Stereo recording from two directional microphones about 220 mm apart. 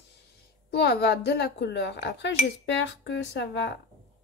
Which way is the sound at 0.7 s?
45° left (ahead or behind).